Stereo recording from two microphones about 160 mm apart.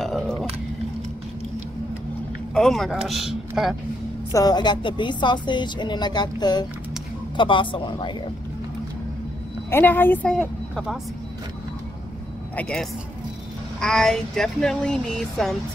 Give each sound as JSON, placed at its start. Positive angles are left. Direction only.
{"t": 0.0, "sound": "a sound", "side_deg": 0}
{"t": 2.5, "sound": "a man's voice", "side_deg": 0}
{"t": 4.3, "sound": "speech", "side_deg": 25}
{"t": 9.7, "sound": "a woman's voice", "side_deg": 15}
{"t": 12.5, "sound": "a man's voice", "side_deg": 5}